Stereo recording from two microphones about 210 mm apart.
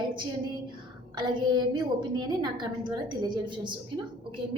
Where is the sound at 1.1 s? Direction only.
20° right (ahead or behind).